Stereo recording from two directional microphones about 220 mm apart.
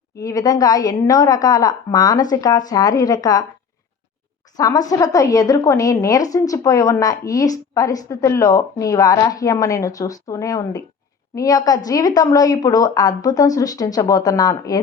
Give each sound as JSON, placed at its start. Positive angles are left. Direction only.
{"t": 0.2, "sound": "a woman's voice", "side_deg": 15}
{"t": 4.5, "sound": "a woman's voice", "side_deg": 15}